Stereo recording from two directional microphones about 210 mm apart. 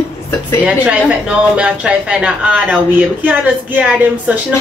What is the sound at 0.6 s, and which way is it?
Speech, 5° right (ahead or behind).